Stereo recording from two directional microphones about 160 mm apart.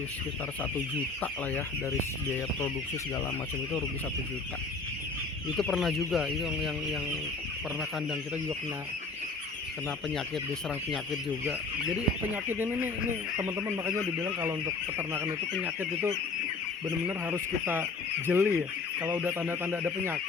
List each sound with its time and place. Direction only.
1.2 s speech: 15° left (ahead or behind)
5.5 s speech: centre (ahead or behind)
12.5 s speech: 10° right (ahead or behind)